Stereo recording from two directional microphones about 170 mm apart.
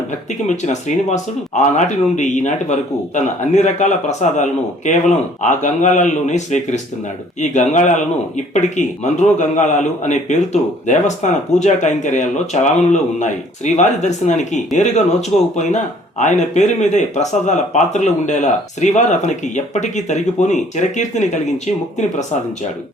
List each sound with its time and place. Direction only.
0.4 s speech: 45° left (ahead or behind)
9.2 s speech: 45° left (ahead or behind)